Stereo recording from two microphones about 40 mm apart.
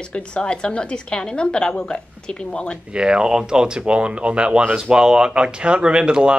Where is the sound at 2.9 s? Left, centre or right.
Right.